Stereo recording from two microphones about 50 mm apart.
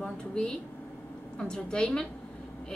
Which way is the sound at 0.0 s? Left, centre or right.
Centre.